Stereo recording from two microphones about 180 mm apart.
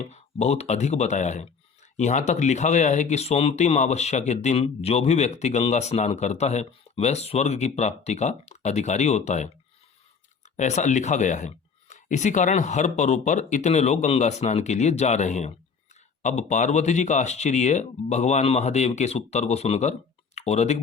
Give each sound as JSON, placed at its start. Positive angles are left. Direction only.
{"t": 0.0, "sound": "speech", "side_deg": 35}